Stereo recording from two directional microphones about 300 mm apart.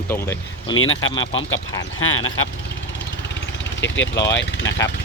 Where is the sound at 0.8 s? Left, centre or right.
Left.